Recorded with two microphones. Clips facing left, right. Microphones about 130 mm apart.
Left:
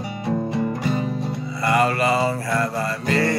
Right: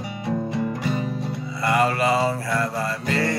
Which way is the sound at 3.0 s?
70° left (ahead or behind).